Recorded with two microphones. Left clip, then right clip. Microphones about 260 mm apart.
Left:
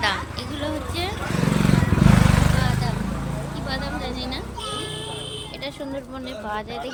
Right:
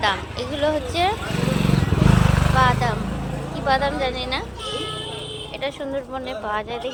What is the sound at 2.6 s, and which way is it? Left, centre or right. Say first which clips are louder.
Vehicle: right 9 dB; centre.